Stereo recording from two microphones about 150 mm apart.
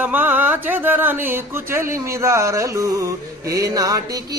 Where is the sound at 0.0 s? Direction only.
10° right (ahead or behind).